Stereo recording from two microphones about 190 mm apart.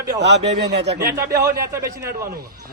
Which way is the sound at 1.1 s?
15° right (ahead or behind).